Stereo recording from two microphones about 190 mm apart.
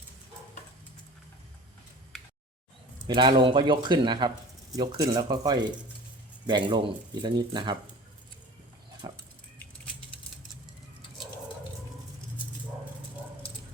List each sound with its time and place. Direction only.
3.2 s speech: 25° right (ahead or behind)
9.0 s pig: 20° right (ahead or behind)